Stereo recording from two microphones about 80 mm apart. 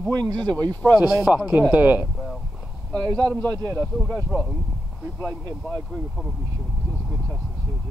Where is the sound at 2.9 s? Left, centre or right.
Right.